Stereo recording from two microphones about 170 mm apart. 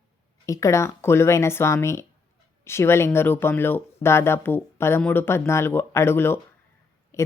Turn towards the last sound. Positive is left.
turn(degrees=15)  # may be behind; listen again after turning